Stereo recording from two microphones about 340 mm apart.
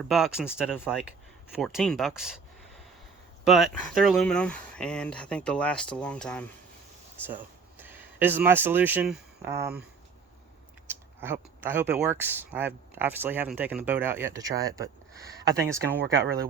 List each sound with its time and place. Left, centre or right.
0.1 s speech: centre
3.4 s speech: centre
10.8 s speech: centre
16.0 s speech: right